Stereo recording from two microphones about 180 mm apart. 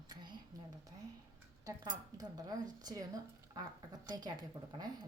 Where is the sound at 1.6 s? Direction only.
20° right (ahead or behind).